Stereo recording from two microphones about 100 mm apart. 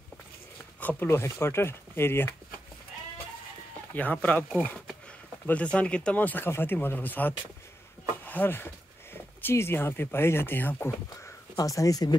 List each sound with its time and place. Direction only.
0.7 s speech: 20° left (ahead or behind)
3.9 s speech: 15° left (ahead or behind)
5.5 s speech: 10° left (ahead or behind); by 12.2 s 40° left (ahead or behind)